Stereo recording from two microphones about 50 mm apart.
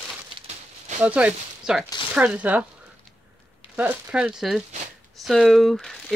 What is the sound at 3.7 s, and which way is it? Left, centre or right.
Speech, right.